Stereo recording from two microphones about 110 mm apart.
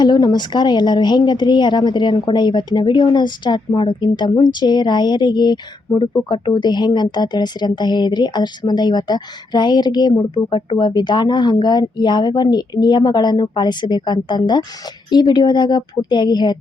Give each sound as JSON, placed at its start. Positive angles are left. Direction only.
{"t": 0.0, "sound": "a woman's voice", "side_deg": 40}